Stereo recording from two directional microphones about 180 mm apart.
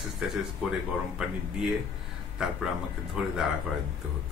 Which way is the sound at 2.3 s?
5° right (ahead or behind).